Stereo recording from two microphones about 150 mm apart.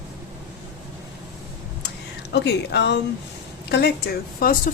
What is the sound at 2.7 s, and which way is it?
Speech, 90° left.